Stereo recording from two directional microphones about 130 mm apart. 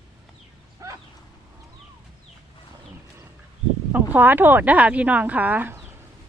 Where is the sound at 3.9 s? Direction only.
15° right (ahead or behind).